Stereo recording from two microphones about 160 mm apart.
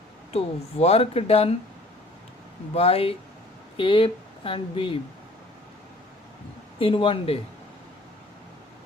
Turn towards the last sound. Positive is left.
turn(degrees=35)  # may be behind; listen again after turning